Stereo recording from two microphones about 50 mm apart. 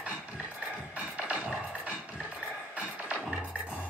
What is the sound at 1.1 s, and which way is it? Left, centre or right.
Music, right.